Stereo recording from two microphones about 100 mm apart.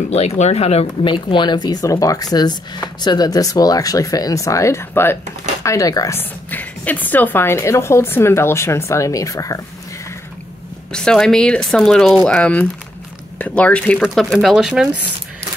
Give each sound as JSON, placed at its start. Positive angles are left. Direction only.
{"t": 0.1, "sound": "speech", "side_deg": 90}
{"t": 1.0, "sound": "speech", "side_deg": 55}
{"t": 6.1, "sound": "a woman's voice", "side_deg": 15}
{"t": 10.9, "sound": "speech", "side_deg": 5}
{"t": 14.0, "sound": "speech", "side_deg": 0}